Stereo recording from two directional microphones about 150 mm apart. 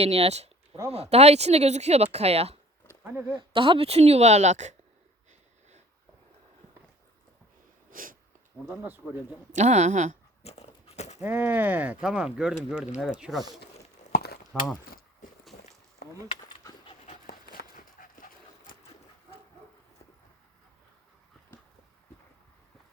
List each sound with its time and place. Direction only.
0.0 s speech: 45° right (ahead or behind)
2.8 s a sound: 15° right (ahead or behind)
3.3 s speech: 35° right (ahead or behind); by 4.7 s 50° right (ahead or behind)
7.9 s snort: 65° right (ahead or behind)
8.6 s speech: 10° right (ahead or behind)
9.6 s speech: 50° right (ahead or behind)
10.4 s horse: 45° left (ahead or behind)
11.2 s speech: 15° right (ahead or behind)
14.1 s a sound: 90° left
14.5 s speech: centre (ahead or behind)
16.3 s dog: 35° left (ahead or behind)
17.2 s horse: 80° left; by 18.3 s 65° left (ahead or behind)